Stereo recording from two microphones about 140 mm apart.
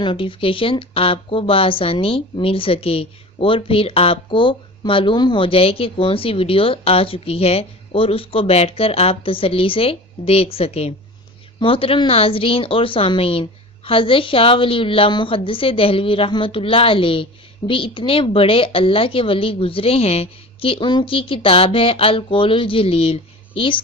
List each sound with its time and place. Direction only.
0.0 s speech: 40° left (ahead or behind)